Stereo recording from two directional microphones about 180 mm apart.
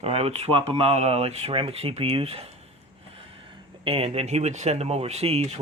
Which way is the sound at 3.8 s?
35° right (ahead or behind).